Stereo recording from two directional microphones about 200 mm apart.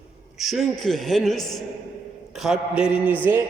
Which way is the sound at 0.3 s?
Centre (ahead or behind).